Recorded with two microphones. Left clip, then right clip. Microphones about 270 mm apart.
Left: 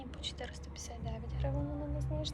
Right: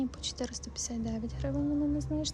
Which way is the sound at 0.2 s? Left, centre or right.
Right.